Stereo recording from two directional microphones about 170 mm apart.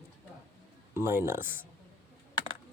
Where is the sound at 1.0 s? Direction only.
15° right (ahead or behind).